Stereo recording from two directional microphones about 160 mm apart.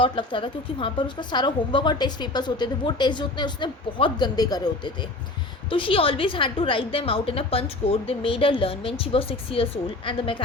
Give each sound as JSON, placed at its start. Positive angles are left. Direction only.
{"t": 0.0, "sound": "a woman's voice", "side_deg": 30}
{"t": 5.7, "sound": "a woman's voice", "side_deg": 35}